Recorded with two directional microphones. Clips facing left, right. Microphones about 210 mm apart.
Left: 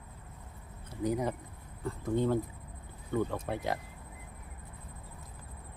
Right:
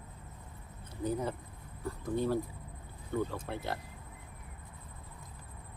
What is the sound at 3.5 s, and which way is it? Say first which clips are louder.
Speech: left 4 dB; 15° left (ahead or behind).